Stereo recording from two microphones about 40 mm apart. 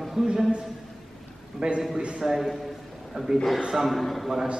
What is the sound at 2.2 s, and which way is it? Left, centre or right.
Speech, centre.